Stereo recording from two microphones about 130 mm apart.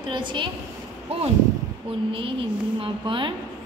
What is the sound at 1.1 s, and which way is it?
Speech, 50° right (ahead or behind).